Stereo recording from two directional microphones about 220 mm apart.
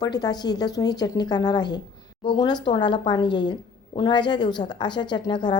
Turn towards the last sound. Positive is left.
turn(degrees=20)  # may be behind; listen again after turning